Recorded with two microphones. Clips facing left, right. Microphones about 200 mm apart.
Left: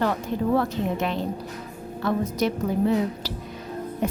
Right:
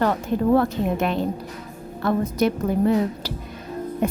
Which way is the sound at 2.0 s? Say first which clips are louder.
Right 3 dB; 55° right (ahead or behind).